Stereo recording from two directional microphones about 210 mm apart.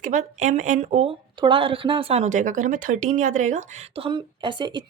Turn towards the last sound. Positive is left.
turn(degrees=-20)  # may be behind; listen again after turning